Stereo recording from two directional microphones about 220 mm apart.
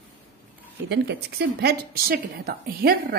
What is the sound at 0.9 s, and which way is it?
A woman's voice, 45° right (ahead or behind).